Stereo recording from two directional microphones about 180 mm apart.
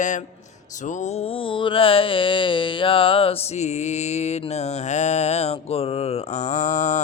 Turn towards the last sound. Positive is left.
turn(degrees=40)  # may be behind; listen again after turning